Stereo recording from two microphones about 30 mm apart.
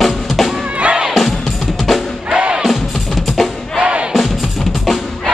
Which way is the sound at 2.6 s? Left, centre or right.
Centre.